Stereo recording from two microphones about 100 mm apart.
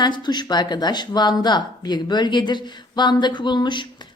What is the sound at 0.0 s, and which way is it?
Speech, 45° left (ahead or behind).